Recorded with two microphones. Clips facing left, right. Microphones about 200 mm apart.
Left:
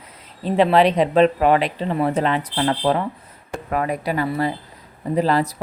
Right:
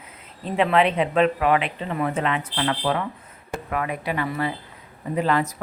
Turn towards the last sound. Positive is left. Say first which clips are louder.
# left 3 dB
turn(degrees=35)  # may be behind; listen again after turning